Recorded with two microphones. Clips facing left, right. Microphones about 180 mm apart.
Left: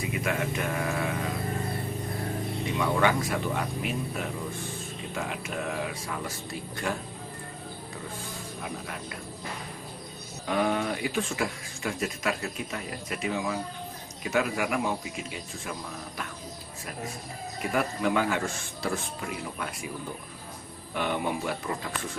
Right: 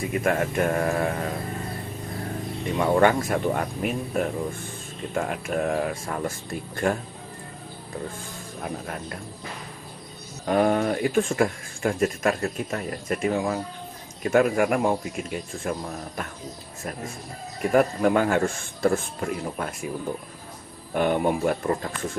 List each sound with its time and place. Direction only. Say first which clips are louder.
0.1 s speech: right 7 dB; 50° right (ahead or behind)
2.7 s speech: right 6 dB; 50° right (ahead or behind)
8.6 s speech: right 6 dB; 45° right (ahead or behind)
10.4 s speech: right 6 dB; 45° right (ahead or behind)
17.6 s speech: right 8 dB; 45° right (ahead or behind)
20.9 s speech: right 7 dB; 45° right (ahead or behind)